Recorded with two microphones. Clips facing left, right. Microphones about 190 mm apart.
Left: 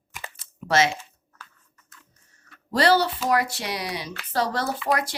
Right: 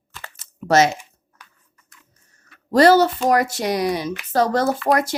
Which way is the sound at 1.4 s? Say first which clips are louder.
Left 2 dB; 15° right (ahead or behind).